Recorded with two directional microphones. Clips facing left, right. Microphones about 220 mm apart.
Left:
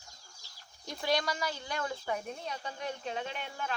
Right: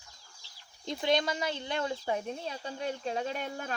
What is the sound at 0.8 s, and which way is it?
Speech, 25° right (ahead or behind).